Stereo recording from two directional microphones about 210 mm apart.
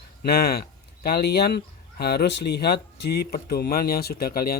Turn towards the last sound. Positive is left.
turn(degrees=45)  # may be behind; listen again after turning